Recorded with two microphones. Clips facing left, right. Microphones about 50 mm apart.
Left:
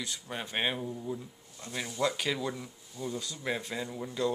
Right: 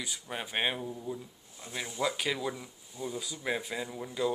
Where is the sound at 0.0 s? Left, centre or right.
Centre.